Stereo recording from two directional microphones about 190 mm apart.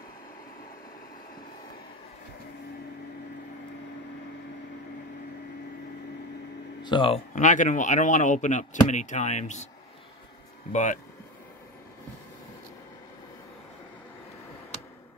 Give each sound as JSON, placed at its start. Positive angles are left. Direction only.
{"t": 6.8, "sound": "speech", "side_deg": 25}
{"t": 7.3, "sound": "speech", "side_deg": 40}
{"t": 10.7, "sound": "speech", "side_deg": 40}